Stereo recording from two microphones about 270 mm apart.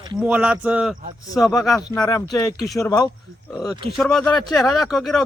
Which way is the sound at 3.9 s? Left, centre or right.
Centre.